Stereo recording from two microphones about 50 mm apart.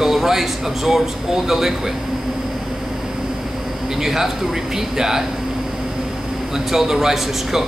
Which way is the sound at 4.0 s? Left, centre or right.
Centre.